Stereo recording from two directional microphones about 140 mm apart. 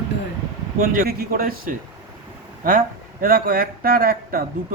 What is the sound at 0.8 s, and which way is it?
Speech, 90° right.